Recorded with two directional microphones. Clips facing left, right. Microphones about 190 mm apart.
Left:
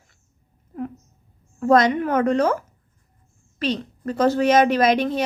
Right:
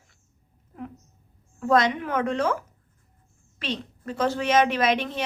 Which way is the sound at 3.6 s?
40° left (ahead or behind).